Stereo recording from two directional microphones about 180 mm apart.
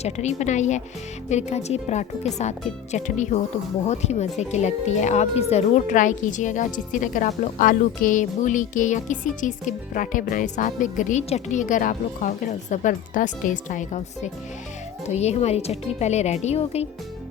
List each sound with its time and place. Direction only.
0.0 s speech: 40° left (ahead or behind)